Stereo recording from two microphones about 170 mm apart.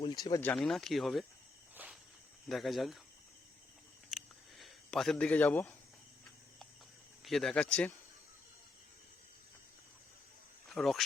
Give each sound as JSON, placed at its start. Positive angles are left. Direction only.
{"t": 0.0, "sound": "speech", "side_deg": 25}
{"t": 0.4, "sound": "speech", "side_deg": 5}
{"t": 1.7, "sound": "cricket", "side_deg": -10}
{"t": 2.5, "sound": "speech", "side_deg": 0}
{"t": 4.1, "sound": "a sound", "side_deg": 0}
{"t": 7.3, "sound": "speech", "side_deg": 0}
{"t": 10.7, "sound": "insect", "side_deg": 0}